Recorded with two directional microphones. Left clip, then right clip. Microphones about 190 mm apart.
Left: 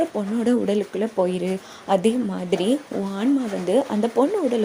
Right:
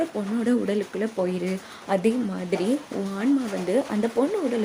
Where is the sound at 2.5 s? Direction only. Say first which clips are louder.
Left 4 dB; 20° left (ahead or behind).